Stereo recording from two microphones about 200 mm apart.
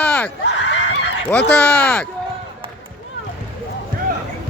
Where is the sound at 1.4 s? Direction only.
5° left (ahead or behind).